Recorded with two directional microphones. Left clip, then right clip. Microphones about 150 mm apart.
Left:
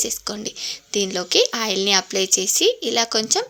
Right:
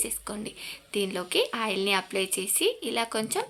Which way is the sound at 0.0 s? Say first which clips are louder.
Left 9 dB; 25° left (ahead or behind).